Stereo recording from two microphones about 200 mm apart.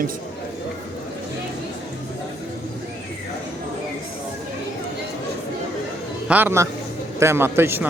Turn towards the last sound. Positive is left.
turn(degrees=-10)  # may be behind; listen again after turning